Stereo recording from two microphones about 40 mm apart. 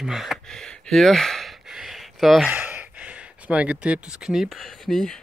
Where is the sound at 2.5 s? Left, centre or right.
Right.